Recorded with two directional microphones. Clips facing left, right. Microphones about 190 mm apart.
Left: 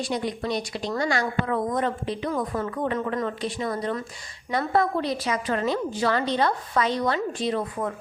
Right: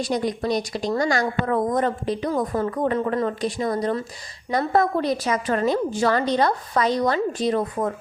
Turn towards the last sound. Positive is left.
turn(degrees=-40)  # may be behind; listen again after turning